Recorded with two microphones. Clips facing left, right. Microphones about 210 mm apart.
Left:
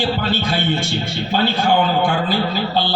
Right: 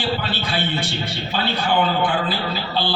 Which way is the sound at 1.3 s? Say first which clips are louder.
Left 5 dB; 45° left (ahead or behind).